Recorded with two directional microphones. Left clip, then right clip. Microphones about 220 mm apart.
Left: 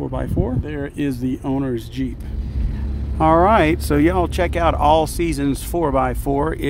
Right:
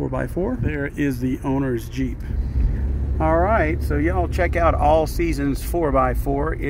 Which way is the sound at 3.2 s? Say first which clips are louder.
Left 5 dB; 15° left (ahead or behind).